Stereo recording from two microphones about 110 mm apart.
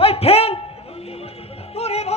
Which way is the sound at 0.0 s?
65° left (ahead or behind).